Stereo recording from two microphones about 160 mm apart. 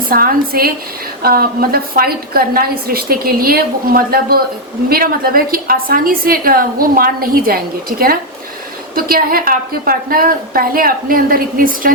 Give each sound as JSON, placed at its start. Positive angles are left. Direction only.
{"t": 0.1, "sound": "a woman's voice", "side_deg": -65}